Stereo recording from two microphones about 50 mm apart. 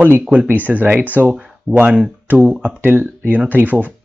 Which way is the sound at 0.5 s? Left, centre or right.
Right.